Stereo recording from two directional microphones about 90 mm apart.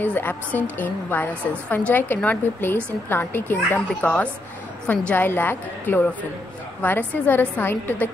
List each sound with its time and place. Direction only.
0.0 s a woman's voice: 20° left (ahead or behind)